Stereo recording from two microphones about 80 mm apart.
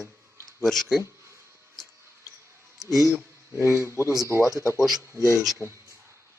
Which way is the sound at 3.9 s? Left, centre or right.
Left.